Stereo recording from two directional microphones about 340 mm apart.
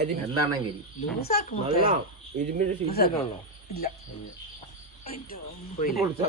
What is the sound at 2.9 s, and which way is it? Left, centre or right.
Speech, left.